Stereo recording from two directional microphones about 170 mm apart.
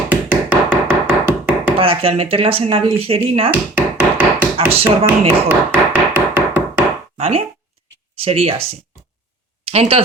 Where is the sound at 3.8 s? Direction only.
10° right (ahead or behind).